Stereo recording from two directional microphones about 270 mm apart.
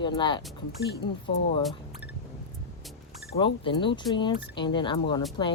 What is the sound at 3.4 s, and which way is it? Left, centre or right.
Speech, centre.